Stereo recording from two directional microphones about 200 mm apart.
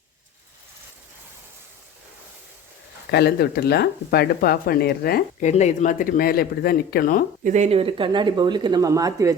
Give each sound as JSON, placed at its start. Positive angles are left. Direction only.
{"t": 3.1, "sound": "speech", "side_deg": 55}
{"t": 5.5, "sound": "speech", "side_deg": 35}
{"t": 7.4, "sound": "speech", "side_deg": -35}